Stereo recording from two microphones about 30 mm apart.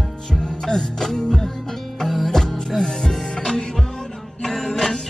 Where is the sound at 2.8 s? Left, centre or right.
Left.